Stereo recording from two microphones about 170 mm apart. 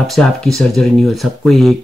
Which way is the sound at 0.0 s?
Centre (ahead or behind).